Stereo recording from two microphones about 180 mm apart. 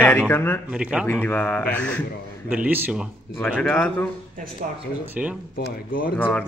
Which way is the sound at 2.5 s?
5° right (ahead or behind).